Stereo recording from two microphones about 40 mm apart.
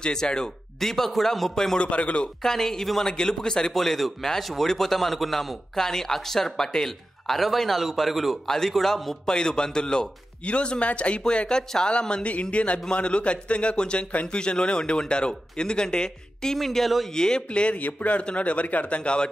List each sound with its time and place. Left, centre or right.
0.0 s a man's voice: centre
1.8 s speech: left
2.4 s a man's voice: centre
3.7 s a man's voice: centre
8.5 s a man's voice: centre
16.5 s a man's voice: centre
17.1 s speech: centre
17.7 s speech: left
18.9 s speech: left